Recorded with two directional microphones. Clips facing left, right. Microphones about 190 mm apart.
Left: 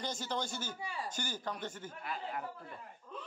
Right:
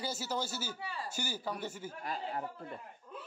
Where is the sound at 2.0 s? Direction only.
35° right (ahead or behind).